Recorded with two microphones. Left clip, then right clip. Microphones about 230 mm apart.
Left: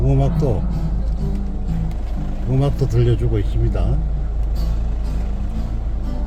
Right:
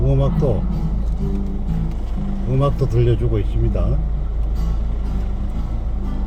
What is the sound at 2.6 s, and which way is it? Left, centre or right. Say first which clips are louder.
Speech: right 2 dB; centre.